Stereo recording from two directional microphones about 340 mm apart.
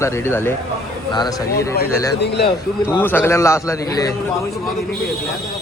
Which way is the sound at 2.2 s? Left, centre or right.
Left.